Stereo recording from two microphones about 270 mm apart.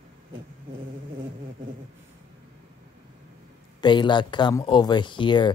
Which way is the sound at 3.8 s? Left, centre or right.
Centre.